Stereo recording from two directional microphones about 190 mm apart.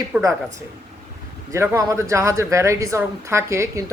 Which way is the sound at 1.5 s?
15° right (ahead or behind).